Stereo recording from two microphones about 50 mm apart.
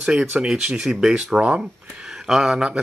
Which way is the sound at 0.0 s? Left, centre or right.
Centre.